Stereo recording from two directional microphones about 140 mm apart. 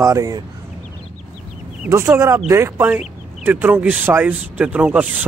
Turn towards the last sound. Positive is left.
turn(degrees=-10)  # may be behind; listen again after turning